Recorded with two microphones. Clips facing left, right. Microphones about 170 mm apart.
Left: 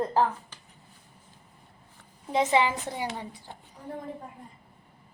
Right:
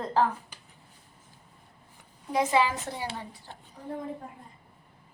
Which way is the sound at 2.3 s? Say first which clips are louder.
Left 1 dB; 20° left (ahead or behind).